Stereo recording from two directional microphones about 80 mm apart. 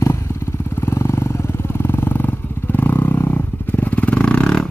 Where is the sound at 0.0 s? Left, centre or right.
Left.